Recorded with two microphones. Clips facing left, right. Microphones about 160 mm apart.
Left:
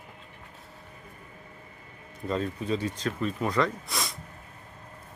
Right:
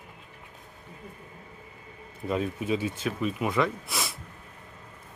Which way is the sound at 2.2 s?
10° right (ahead or behind).